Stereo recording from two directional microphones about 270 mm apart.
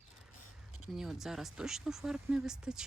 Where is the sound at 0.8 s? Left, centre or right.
Centre.